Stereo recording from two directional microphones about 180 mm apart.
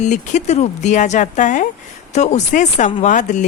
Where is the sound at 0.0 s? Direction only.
40° left (ahead or behind).